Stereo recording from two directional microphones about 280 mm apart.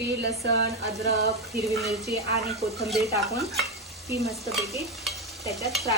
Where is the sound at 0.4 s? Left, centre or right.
Right.